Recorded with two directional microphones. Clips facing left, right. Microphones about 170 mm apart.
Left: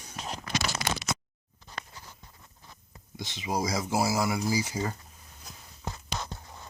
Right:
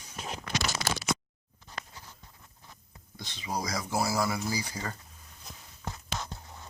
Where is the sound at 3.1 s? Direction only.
20° left (ahead or behind).